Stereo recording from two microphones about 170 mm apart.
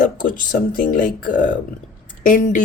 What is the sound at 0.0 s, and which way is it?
A woman's voice, 50° left (ahead or behind).